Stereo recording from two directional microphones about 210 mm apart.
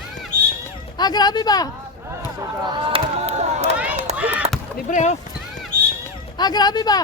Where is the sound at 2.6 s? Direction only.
25° right (ahead or behind).